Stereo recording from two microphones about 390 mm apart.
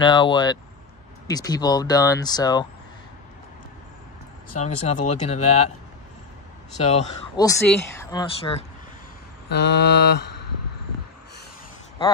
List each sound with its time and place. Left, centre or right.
0.0 s speech: centre
4.6 s speech: centre
6.8 s speech: centre
9.5 s mantra: left